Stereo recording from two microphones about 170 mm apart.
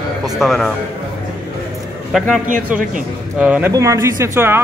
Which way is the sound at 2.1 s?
Centre (ahead or behind).